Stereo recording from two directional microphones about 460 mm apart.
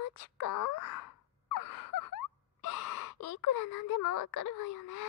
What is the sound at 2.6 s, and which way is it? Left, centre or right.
Speech, left.